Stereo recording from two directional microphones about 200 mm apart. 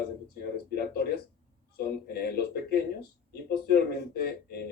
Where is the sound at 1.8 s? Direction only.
50° left (ahead or behind).